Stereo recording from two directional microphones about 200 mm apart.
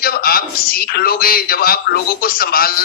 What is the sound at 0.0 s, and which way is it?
A man's voice, 45° left (ahead or behind).